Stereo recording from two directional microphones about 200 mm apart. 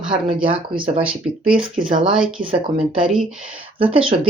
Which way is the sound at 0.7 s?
25° right (ahead or behind).